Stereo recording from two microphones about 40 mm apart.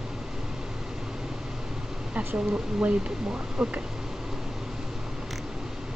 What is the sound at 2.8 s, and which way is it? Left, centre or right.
Speech, right.